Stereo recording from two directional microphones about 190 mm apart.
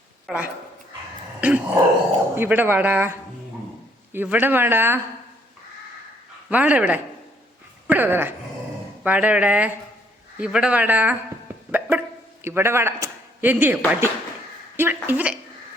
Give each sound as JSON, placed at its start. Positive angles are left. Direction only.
{"t": 0.3, "sound": "speech", "side_deg": -5}
{"t": 1.4, "sound": "a sound", "side_deg": -5}
{"t": 2.3, "sound": "speech", "side_deg": -10}
{"t": 6.5, "sound": "speech", "side_deg": -10}
{"t": 11.7, "sound": "music", "side_deg": -10}
{"t": 12.5, "sound": "speech", "side_deg": -15}